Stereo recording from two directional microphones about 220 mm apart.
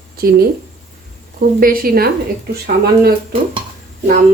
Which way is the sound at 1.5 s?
40° right (ahead or behind).